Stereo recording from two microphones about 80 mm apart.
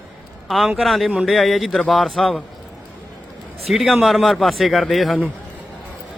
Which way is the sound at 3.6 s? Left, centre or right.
Centre.